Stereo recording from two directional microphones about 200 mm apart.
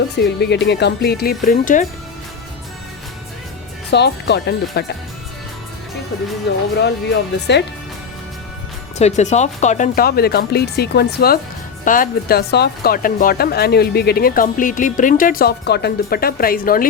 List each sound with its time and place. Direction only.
0.2 s speech: 60° left (ahead or behind); by 1.9 s 40° left (ahead or behind)
3.9 s speech: 60° left (ahead or behind)
6.5 s speech: 60° left (ahead or behind)
9.0 s speech: 35° left (ahead or behind)